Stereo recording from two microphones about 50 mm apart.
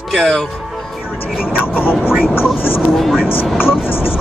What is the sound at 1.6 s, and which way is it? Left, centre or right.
Speech, left.